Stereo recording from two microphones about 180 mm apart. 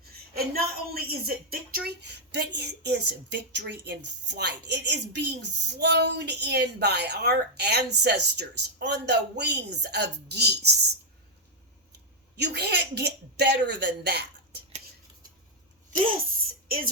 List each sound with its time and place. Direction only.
0.3 s a woman's voice: 55° right (ahead or behind)
12.4 s a woman's voice: 65° right (ahead or behind)
16.6 s speech: 55° right (ahead or behind)